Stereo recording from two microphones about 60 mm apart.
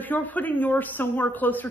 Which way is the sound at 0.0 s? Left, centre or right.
Left.